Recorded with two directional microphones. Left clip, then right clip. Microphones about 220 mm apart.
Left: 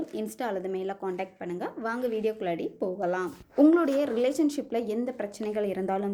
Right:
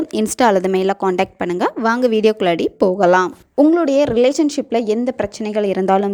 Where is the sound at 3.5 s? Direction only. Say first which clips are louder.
Right 9 dB; 25° right (ahead or behind).